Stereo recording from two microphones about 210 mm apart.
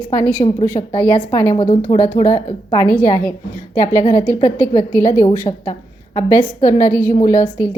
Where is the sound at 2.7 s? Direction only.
15° left (ahead or behind).